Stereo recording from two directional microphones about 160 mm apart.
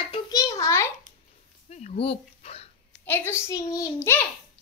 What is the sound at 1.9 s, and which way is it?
Speech, 35° left (ahead or behind).